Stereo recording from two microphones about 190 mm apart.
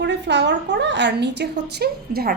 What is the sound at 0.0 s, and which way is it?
A woman's voice, 65° right (ahead or behind).